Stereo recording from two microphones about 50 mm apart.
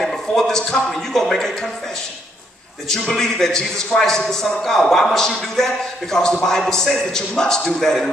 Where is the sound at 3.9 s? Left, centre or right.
Left.